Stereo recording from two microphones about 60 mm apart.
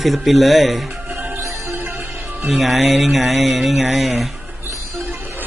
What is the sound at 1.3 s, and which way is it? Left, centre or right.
Music, right.